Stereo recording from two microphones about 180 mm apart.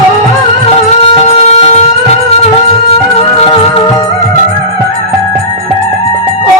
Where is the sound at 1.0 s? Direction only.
35° left (ahead or behind).